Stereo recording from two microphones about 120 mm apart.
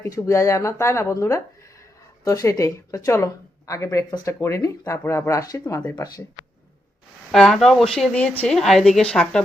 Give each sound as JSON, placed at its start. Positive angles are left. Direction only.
{"t": 0.0, "sound": "speech", "side_deg": 25}
{"t": 6.4, "sound": "a sound", "side_deg": -40}
{"t": 7.3, "sound": "speech", "side_deg": 5}
{"t": 8.4, "sound": "speech", "side_deg": 0}